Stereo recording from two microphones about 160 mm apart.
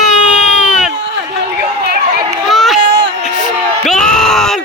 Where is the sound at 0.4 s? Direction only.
5° right (ahead or behind).